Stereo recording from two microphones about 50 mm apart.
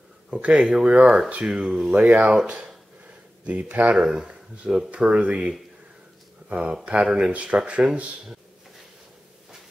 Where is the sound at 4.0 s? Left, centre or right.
Centre.